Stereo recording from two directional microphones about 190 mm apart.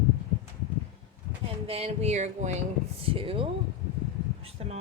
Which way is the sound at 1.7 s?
35° right (ahead or behind).